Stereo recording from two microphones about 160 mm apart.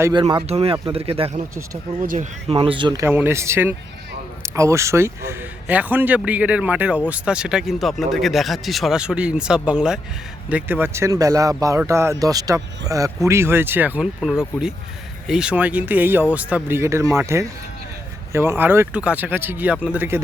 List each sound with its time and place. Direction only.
0.0 s speech: 30° right (ahead or behind)
0.4 s speech: 40° right (ahead or behind)
2.0 s speech: 55° right (ahead or behind)
2.5 s a man's voice: 35° right (ahead or behind); by 20.1 s 10° right (ahead or behind)